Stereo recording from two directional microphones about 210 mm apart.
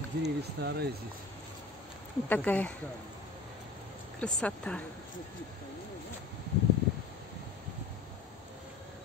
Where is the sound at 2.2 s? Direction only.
10° left (ahead or behind).